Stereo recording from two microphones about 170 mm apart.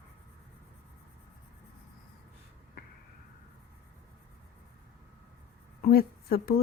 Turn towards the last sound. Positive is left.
turn(degrees=60)  # may be behind; listen again after turning